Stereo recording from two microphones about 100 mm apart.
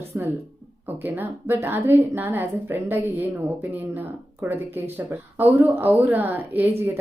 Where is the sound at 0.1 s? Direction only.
20° right (ahead or behind).